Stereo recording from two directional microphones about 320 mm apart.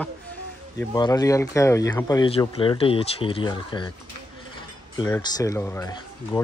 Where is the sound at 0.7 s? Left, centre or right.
Centre.